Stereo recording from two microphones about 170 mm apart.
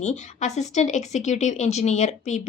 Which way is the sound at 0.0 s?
40° left (ahead or behind).